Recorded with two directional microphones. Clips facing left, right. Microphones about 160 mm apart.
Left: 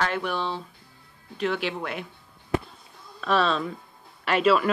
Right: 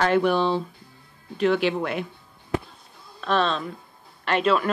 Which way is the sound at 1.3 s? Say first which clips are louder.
Right 6 dB; 55° right (ahead or behind).